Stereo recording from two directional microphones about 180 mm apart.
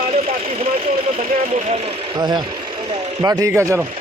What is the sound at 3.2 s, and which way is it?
Speech, 15° right (ahead or behind).